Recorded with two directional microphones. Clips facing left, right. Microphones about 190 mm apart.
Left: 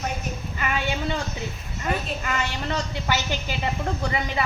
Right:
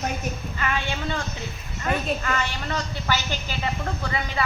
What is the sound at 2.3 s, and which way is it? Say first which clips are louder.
Speech: even; 20° left (ahead or behind).